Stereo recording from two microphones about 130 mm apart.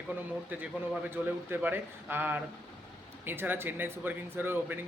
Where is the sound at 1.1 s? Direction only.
15° right (ahead or behind).